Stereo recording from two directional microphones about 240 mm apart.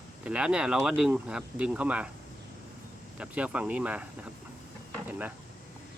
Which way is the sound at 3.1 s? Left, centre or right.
Centre.